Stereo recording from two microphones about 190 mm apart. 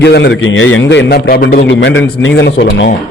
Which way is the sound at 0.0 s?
65° left (ahead or behind).